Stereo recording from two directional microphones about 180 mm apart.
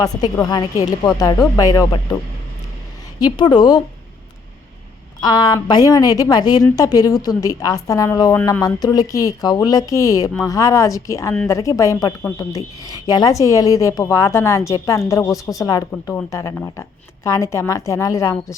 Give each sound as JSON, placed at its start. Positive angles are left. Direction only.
{"t": 0.0, "sound": "a woman's voice", "side_deg": 20}
{"t": 3.2, "sound": "a woman's voice", "side_deg": 25}
{"t": 5.2, "sound": "a woman's voice", "side_deg": 20}
{"t": 8.4, "sound": "speech", "side_deg": 10}
{"t": 8.6, "sound": "a woman's voice", "side_deg": 20}